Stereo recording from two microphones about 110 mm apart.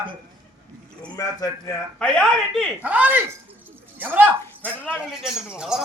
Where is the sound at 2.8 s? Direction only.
15° right (ahead or behind).